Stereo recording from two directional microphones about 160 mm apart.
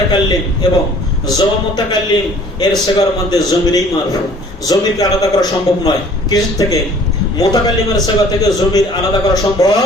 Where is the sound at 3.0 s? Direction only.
25° left (ahead or behind).